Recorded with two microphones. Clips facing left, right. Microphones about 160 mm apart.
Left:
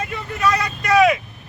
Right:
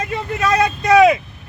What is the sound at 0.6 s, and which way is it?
Speech, 20° right (ahead or behind).